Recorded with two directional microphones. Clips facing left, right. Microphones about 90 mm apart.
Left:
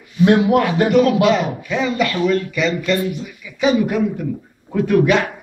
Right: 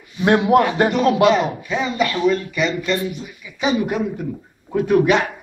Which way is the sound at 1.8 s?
5° right (ahead or behind).